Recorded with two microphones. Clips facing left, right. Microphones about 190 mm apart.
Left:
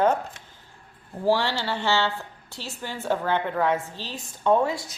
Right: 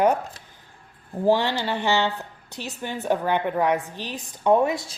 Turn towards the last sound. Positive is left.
turn(degrees=-25)  # may be behind; listen again after turning